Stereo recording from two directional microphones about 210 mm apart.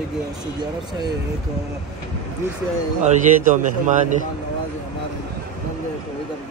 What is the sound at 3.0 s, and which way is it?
A man's voice, 35° right (ahead or behind).